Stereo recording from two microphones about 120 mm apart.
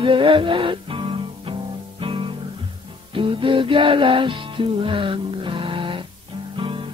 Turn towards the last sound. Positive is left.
turn(degrees=-45)  # may be behind; listen again after turning